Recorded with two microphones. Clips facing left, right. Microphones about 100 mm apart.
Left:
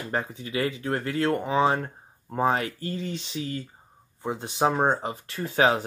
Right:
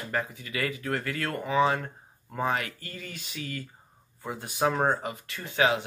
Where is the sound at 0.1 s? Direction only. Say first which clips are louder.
Left 3 dB; 30° left (ahead or behind).